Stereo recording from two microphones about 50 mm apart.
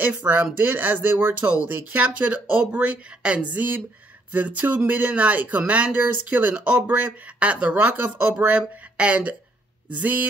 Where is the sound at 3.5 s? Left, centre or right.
Right.